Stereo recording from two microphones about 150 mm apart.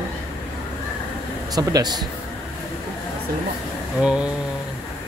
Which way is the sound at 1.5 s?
25° right (ahead or behind).